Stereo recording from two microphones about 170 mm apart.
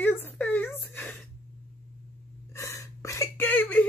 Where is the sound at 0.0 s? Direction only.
10° left (ahead or behind).